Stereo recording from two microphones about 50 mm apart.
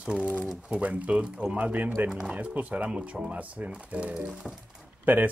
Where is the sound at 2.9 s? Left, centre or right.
Centre.